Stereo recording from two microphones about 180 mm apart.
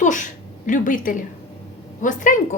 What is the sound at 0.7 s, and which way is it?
A woman's voice, 45° left (ahead or behind).